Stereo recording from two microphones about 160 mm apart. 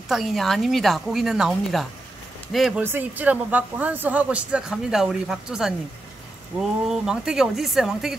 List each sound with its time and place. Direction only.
0.1 s a woman's voice: centre (ahead or behind)
2.8 s speech: 10° right (ahead or behind)
6.9 s a woman's voice: 5° right (ahead or behind)